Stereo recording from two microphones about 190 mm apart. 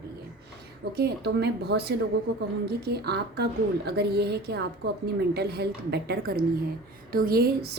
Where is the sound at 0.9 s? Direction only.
60° right (ahead or behind).